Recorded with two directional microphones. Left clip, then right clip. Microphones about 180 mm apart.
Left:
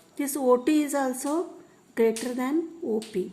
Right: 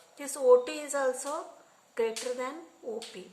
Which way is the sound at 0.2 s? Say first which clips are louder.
Even; 40° left (ahead or behind).